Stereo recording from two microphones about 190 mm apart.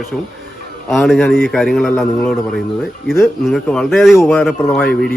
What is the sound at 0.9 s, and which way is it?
A man's voice, centre (ahead or behind).